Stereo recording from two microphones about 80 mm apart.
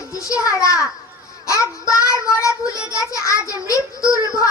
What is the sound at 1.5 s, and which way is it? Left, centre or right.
Child singing, left.